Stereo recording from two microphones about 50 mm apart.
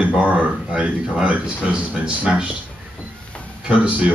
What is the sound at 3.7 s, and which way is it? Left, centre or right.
Speech, right.